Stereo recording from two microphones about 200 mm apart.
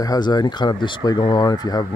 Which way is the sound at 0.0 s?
20° left (ahead or behind).